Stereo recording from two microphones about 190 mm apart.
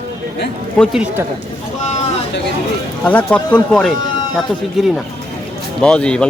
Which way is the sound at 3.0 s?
5° left (ahead or behind).